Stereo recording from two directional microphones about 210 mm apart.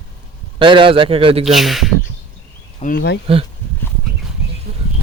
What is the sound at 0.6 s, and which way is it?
Speech, 25° right (ahead or behind).